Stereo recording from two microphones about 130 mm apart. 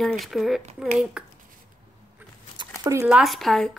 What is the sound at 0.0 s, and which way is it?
Speech, centre (ahead or behind).